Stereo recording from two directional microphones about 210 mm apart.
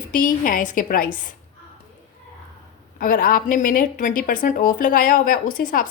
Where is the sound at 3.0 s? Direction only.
40° left (ahead or behind).